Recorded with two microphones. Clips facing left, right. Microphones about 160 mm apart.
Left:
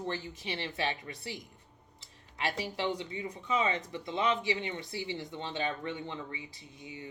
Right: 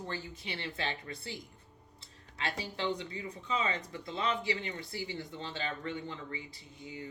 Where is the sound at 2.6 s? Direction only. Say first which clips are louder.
Left 1 dB; 15° left (ahead or behind).